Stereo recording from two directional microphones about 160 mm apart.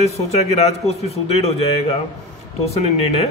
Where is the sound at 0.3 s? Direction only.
40° left (ahead or behind).